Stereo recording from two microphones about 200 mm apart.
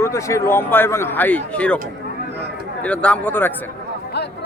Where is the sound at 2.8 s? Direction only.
5° left (ahead or behind).